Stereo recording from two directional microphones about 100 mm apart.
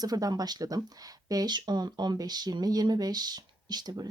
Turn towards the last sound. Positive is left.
turn(degrees=-40)  # may be behind; listen again after turning